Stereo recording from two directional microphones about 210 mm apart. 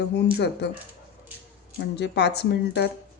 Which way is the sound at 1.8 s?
50° left (ahead or behind).